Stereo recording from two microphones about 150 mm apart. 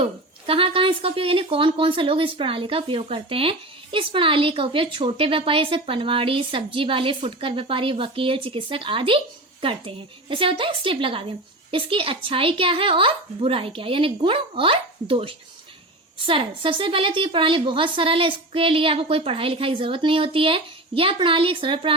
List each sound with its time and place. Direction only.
0.0 s speech: 35° right (ahead or behind)